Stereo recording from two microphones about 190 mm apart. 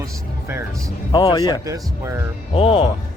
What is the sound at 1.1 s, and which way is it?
Speech, 20° left (ahead or behind).